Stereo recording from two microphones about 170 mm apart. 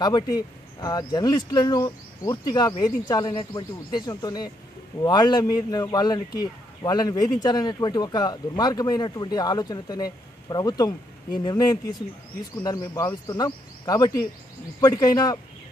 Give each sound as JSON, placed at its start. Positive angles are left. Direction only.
{"t": 0.7, "sound": "speech", "side_deg": 25}